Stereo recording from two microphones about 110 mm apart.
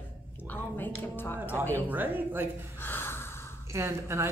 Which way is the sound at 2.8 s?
20° left (ahead or behind).